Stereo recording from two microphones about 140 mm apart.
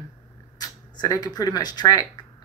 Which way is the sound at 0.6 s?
25° left (ahead or behind).